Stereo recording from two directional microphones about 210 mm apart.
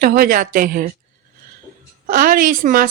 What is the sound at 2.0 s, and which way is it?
Speech, 40° right (ahead or behind).